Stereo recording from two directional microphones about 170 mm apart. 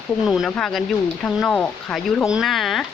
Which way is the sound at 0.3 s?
Centre (ahead or behind).